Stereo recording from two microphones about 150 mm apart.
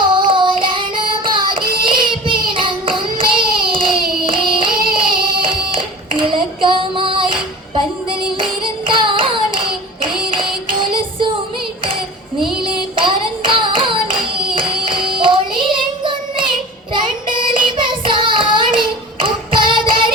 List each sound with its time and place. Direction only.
0.0 s child singing: 35° right (ahead or behind)
4.3 s singing: 35° right (ahead or behind)
8.9 s child singing: 35° right (ahead or behind)
10.3 s music: 35° right (ahead or behind)
12.6 s hands: 35° right (ahead or behind)
17.3 s child singing: 35° right (ahead or behind)